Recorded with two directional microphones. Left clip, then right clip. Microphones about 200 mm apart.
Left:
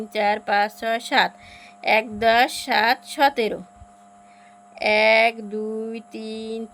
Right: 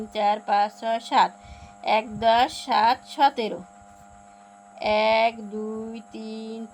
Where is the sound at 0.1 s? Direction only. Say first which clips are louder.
Left 1 dB; 30° left (ahead or behind).